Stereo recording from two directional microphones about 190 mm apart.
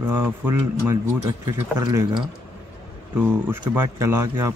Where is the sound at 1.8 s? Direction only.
25° right (ahead or behind).